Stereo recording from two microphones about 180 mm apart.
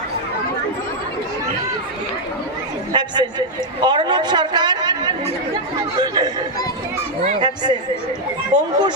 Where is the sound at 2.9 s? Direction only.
25° right (ahead or behind).